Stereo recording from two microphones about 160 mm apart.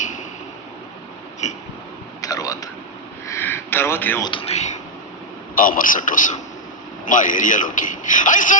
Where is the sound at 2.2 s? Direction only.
20° left (ahead or behind).